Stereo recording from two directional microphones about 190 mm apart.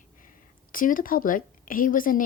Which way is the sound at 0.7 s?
45° left (ahead or behind).